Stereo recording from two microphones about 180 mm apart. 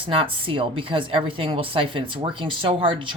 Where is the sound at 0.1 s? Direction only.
30° right (ahead or behind).